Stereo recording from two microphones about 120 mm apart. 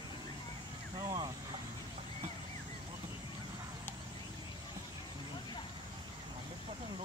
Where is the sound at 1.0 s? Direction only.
35° right (ahead or behind).